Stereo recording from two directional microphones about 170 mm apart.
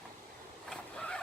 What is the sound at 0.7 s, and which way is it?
Vehicle, 5° left (ahead or behind).